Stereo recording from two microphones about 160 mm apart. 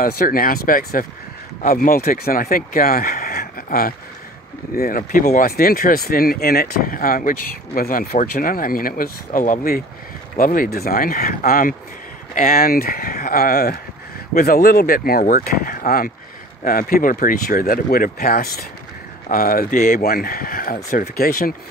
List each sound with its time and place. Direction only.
0.0 s speech: 65° left (ahead or behind)